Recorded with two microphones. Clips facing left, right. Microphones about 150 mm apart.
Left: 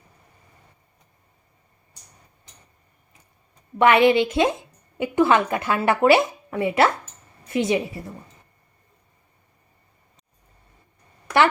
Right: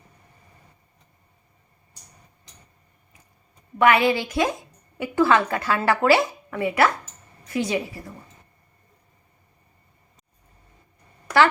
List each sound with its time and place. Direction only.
3.8 s speech: 25° left (ahead or behind)